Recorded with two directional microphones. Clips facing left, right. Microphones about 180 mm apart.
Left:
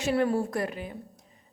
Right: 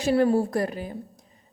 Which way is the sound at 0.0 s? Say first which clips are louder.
Right 5 dB; 35° right (ahead or behind).